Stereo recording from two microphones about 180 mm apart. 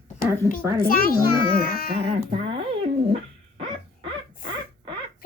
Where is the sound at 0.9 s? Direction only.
55° left (ahead or behind).